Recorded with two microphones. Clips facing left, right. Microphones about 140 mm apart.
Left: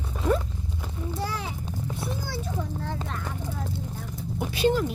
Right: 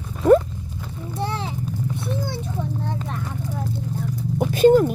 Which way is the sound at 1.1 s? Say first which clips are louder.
Right 5 dB; 25° right (ahead or behind).